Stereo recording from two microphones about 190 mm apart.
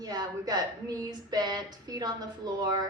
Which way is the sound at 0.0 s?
20° right (ahead or behind).